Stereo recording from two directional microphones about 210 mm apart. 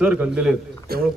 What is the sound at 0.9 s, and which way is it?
Speech, 45° right (ahead or behind).